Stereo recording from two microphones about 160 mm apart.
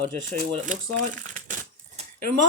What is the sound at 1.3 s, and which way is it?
Crushing, 55° right (ahead or behind).